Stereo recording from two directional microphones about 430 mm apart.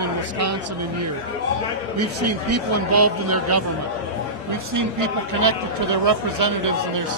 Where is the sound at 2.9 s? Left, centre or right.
Right.